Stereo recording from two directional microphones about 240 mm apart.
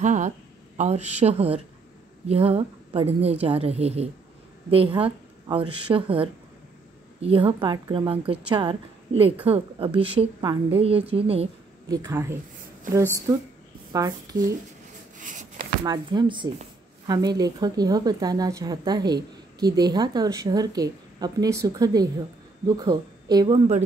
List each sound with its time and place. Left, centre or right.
0.0 s a woman's voice: right
11.9 s speech: centre
15.1 s a sound: right
15.8 s speech: centre